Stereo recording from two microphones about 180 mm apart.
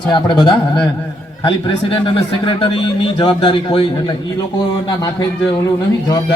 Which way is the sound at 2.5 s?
30° left (ahead or behind).